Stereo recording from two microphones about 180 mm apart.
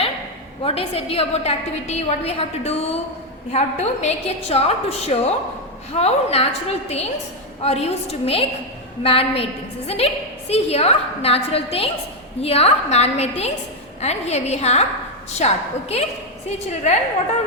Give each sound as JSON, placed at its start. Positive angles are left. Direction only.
{"t": 0.6, "sound": "a woman's voice", "side_deg": 35}